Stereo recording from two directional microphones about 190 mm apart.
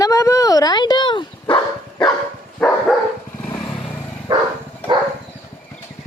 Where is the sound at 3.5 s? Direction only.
25° left (ahead or behind).